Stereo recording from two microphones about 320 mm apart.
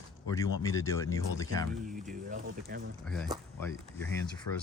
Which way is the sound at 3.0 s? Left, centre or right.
Centre.